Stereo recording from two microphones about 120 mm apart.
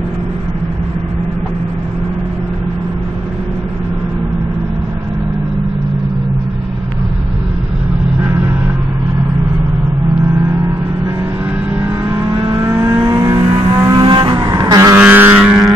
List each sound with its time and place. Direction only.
12.5 s vehicle: 25° right (ahead or behind); by 14.5 s 40° right (ahead or behind)
14.5 s vehicle: 30° right (ahead or behind)
15.0 s vehicle: 15° right (ahead or behind)